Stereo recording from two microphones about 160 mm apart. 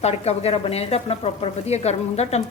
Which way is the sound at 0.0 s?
40° left (ahead or behind).